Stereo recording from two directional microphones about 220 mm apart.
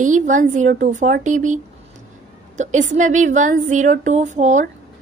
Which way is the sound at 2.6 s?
35° right (ahead or behind).